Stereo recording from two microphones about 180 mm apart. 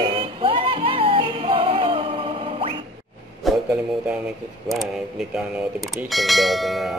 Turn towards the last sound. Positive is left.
turn(degrees=0)  # may be behind; listen again after turning